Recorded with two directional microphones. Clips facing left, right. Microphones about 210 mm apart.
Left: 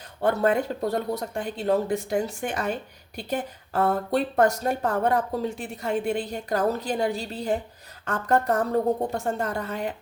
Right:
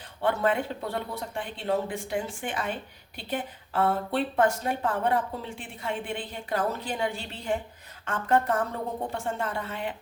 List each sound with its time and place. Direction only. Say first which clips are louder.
0.2 s speech: left 4 dB; 40° left (ahead or behind)